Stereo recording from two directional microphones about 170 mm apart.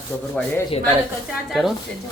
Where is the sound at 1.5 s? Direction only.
Centre (ahead or behind).